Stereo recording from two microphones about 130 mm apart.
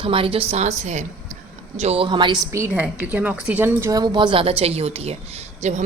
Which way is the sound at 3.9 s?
35° right (ahead or behind).